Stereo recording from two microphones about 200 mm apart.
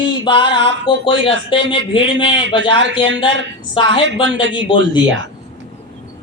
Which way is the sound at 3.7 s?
25° left (ahead or behind).